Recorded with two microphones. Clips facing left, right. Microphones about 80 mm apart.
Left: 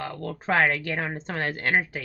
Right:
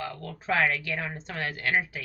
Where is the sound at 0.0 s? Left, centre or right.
Left.